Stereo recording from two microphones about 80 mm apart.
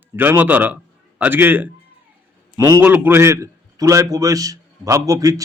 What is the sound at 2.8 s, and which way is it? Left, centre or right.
A man's voice, right.